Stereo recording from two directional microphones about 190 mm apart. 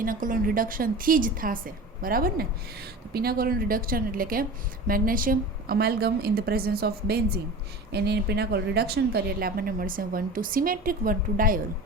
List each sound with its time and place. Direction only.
0.0 s a woman's voice: 45° right (ahead or behind)